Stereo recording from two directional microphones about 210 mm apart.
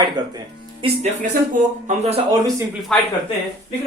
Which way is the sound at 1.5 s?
35° right (ahead or behind).